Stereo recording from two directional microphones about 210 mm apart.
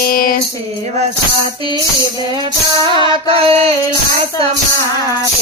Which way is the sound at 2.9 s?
25° right (ahead or behind).